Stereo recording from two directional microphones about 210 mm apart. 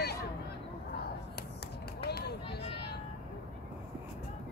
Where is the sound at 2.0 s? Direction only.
50° left (ahead or behind).